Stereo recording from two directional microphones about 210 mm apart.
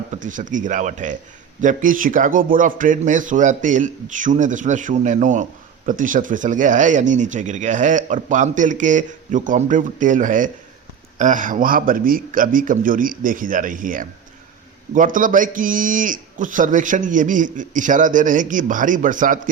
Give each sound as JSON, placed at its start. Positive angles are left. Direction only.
{"t": 0.1, "sound": "a man's voice", "side_deg": -35}